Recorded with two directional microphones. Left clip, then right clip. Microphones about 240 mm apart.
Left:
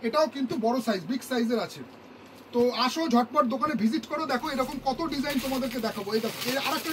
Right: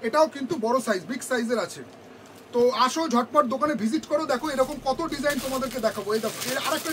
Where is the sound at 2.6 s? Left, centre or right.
Right.